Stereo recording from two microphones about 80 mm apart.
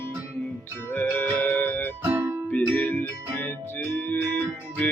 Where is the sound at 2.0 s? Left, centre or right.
Right.